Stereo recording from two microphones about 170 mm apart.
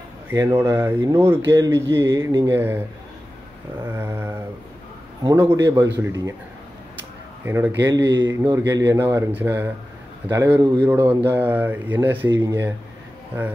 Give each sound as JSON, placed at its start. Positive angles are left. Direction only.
{"t": 0.3, "sound": "speech", "side_deg": -15}
{"t": 3.8, "sound": "a sound", "side_deg": -15}
{"t": 5.2, "sound": "speech", "side_deg": -15}
{"t": 7.4, "sound": "speech", "side_deg": -15}